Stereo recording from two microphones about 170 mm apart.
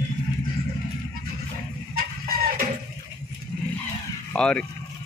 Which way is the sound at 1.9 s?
60° right (ahead or behind).